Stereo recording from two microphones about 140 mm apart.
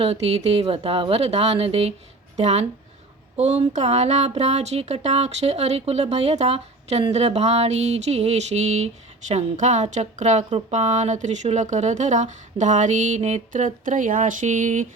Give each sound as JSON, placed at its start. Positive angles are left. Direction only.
{"t": 0.0, "sound": "speech", "side_deg": -45}